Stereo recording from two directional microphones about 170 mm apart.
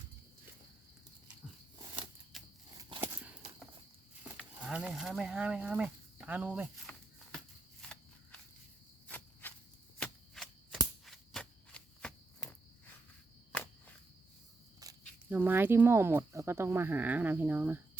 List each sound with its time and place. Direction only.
2.3 s scissors: centre (ahead or behind)
4.6 s speech: 5° right (ahead or behind)
6.8 s a sound: 5° left (ahead or behind)
9.0 s insect: 10° left (ahead or behind)
10.0 s shuffling cards: centre (ahead or behind)
11.0 s a sound: centre (ahead or behind)
13.5 s cricket: 10° left (ahead or behind)
14.8 s a sound: 20° right (ahead or behind)
15.3 s speech: 10° right (ahead or behind)